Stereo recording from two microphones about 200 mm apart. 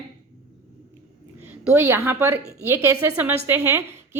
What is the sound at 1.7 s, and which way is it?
A woman's voice, 10° right (ahead or behind).